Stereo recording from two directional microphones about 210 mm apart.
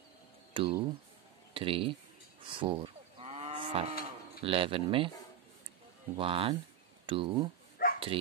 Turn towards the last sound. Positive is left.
turn(degrees=45)  # may be behind; listen again after turning